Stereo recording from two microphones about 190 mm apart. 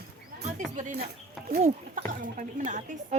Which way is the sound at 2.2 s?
40° right (ahead or behind).